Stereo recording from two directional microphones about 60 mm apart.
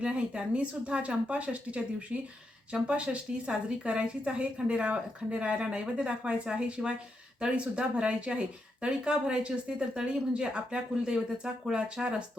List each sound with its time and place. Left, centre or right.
0.0 s a woman's voice: centre